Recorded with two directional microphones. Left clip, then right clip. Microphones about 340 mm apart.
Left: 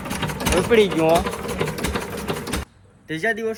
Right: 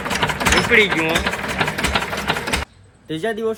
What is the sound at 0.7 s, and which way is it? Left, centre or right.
Speech, centre.